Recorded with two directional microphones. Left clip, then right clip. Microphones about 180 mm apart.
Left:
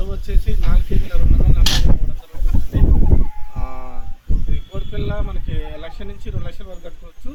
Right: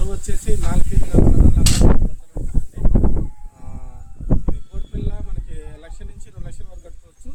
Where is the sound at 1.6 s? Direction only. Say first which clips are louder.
Left 2 dB; 55° right (ahead or behind).